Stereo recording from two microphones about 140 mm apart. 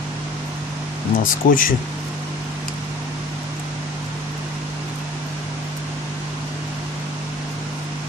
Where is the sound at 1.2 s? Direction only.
80° left.